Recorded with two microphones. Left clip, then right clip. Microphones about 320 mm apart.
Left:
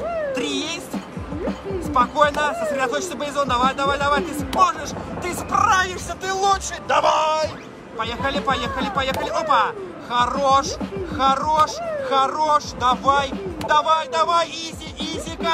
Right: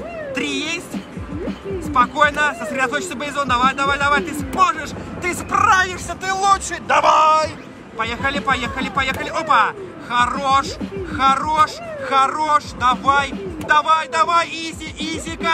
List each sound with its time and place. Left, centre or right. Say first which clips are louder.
0.3 s music: right 2 dB; centre
2.0 s speech: right 2 dB; centre
15.0 s music: right 1 dB; centre